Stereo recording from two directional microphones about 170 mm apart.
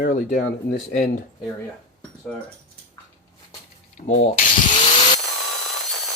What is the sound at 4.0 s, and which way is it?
Speech, 45° left (ahead or behind).